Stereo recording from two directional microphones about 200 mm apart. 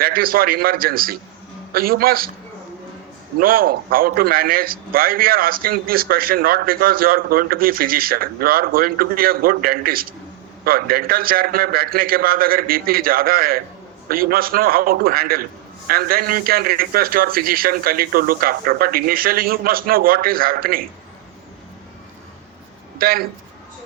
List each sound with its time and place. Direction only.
0.0 s a man's voice: 45° right (ahead or behind)
3.4 s a man's voice: 45° right (ahead or behind)
23.0 s speech: 50° right (ahead or behind)